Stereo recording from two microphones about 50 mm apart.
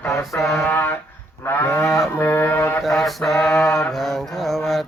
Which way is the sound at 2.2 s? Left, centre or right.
Left.